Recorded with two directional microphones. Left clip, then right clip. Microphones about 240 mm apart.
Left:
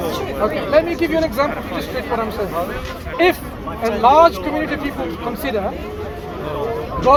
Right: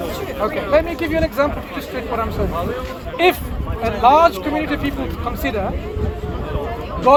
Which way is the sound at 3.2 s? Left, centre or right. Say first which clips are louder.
Even; right.